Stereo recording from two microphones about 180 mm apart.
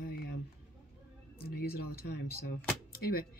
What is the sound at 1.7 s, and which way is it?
Speech, 55° left (ahead or behind).